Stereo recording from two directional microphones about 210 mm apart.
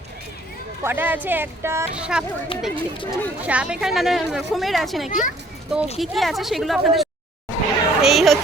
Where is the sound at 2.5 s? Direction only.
25° left (ahead or behind).